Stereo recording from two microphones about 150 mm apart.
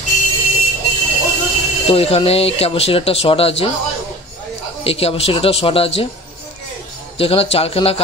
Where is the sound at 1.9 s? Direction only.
40° left (ahead or behind).